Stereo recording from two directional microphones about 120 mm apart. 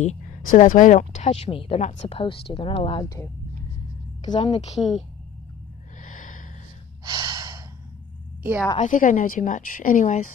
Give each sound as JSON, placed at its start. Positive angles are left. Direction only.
{"t": 0.0, "sound": "speech", "side_deg": 80}
{"t": 1.8, "sound": "a woman's voice", "side_deg": 65}
{"t": 4.5, "sound": "speech", "side_deg": 65}
{"t": 4.7, "sound": "a woman's voice", "side_deg": 0}
{"t": 6.0, "sound": "gasp", "side_deg": 90}
{"t": 7.1, "sound": "gasp", "side_deg": -35}
{"t": 8.4, "sound": "a woman's voice", "side_deg": -15}
{"t": 8.7, "sound": "a woman's voice", "side_deg": 90}